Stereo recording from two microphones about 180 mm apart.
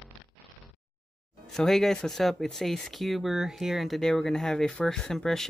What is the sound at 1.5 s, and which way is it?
Speech, centre (ahead or behind).